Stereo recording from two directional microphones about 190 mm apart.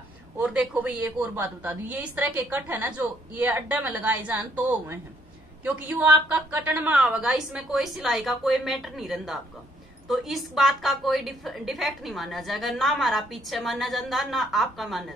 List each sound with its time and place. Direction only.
0.4 s a woman's voice: 5° right (ahead or behind)